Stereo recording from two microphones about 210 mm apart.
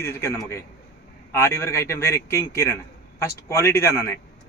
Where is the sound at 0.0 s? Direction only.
15° left (ahead or behind).